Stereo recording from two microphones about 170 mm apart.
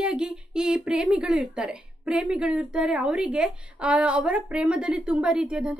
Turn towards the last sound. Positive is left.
turn(degrees=-5)  # may be behind; listen again after turning